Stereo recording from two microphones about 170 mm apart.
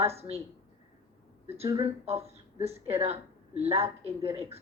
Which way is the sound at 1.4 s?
35° right (ahead or behind).